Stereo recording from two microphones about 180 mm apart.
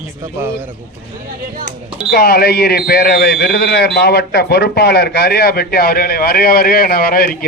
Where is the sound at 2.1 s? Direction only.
60° left (ahead or behind).